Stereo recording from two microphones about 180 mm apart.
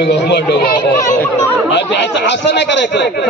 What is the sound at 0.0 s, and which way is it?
Speech, 70° left (ahead or behind).